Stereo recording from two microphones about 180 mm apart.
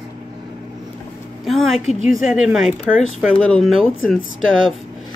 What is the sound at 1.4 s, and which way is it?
A woman's voice, centre (ahead or behind).